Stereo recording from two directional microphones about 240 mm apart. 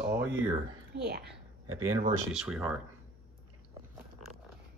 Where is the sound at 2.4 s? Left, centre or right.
Centre.